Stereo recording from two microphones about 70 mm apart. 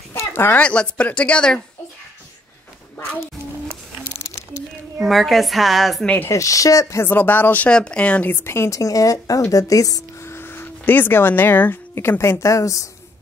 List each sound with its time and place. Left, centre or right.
0.1 s a sound: left
0.6 s speech: centre
5.0 s a woman's voice: centre
6.2 s a woman's voice: left
7.1 s speech: left
7.7 s speech: centre
8.3 s a woman's voice: left
10.2 s a sound: left
11.9 s a woman's voice: left